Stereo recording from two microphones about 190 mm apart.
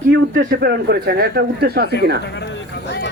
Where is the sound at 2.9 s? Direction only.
65° left (ahead or behind).